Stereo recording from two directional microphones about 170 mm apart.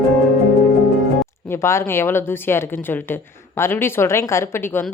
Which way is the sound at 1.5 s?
15° left (ahead or behind).